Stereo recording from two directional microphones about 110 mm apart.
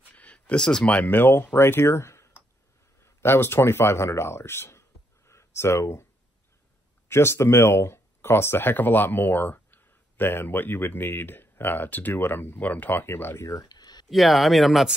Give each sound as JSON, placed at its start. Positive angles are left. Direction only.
{"t": 0.1, "sound": "speech", "side_deg": 10}
{"t": 7.1, "sound": "speech", "side_deg": 25}
{"t": 14.0, "sound": "speech", "side_deg": 0}